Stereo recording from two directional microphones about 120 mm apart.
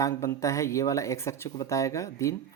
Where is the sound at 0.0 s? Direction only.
25° left (ahead or behind).